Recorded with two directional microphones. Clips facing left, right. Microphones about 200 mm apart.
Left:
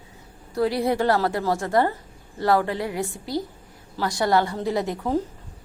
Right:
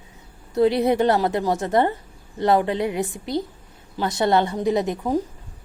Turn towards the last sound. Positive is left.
turn(degrees=-15)  # may be behind; listen again after turning